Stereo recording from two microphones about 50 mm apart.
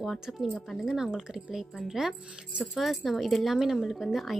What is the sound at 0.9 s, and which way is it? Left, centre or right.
A woman's voice, centre.